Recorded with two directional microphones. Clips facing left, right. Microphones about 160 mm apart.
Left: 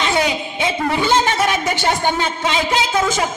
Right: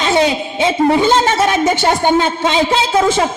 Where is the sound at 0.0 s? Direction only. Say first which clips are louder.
Right 5 dB; 25° right (ahead or behind).